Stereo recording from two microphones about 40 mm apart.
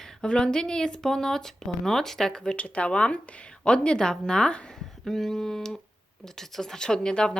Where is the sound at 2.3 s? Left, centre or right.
Left.